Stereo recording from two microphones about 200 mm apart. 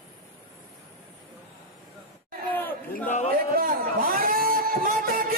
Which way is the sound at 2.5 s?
10° left (ahead or behind).